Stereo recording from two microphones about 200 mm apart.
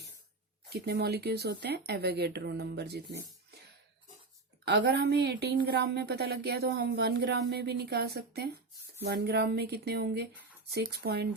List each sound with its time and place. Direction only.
0.7 s speech: 55° right (ahead or behind)
4.6 s speech: 55° right (ahead or behind)